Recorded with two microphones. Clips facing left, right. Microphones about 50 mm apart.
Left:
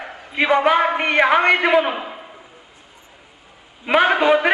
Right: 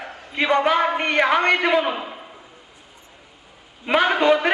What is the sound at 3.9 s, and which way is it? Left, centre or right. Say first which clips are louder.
Speech: left 2 dB; centre.